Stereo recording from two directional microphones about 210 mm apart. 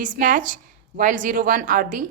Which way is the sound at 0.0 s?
40° right (ahead or behind).